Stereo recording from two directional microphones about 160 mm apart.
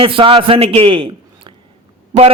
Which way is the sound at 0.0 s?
35° right (ahead or behind).